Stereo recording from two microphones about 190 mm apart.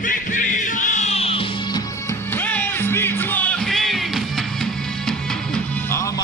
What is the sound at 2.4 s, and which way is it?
Music, 10° left (ahead or behind).